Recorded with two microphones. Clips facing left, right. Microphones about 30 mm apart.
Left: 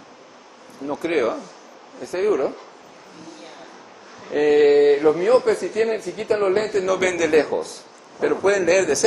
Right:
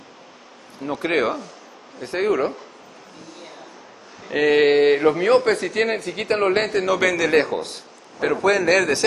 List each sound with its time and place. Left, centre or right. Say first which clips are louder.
0.8 s speech: even; right
2.1 s speech: even; right
4.3 s speech: left 1 dB; right
7.0 s a man's voice: right 1 dB; centre
7.4 s a man's voice: left 1 dB; right
8.5 s speech: even; right